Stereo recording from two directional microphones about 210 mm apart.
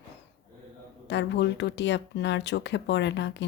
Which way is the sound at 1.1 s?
55° left (ahead or behind).